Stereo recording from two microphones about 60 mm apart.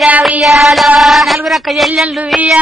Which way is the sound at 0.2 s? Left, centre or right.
Centre.